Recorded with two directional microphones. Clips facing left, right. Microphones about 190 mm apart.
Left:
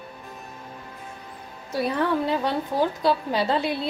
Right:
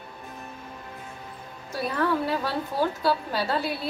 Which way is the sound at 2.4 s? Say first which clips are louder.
Left 3 dB; 20° left (ahead or behind).